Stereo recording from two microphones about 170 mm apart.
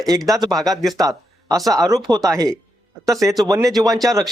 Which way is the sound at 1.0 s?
20° right (ahead or behind).